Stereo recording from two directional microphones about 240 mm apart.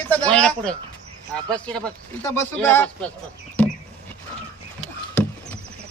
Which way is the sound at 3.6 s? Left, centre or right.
Centre.